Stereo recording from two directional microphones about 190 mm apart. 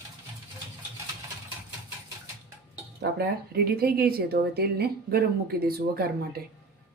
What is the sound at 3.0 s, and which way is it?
Speech, 55° right (ahead or behind).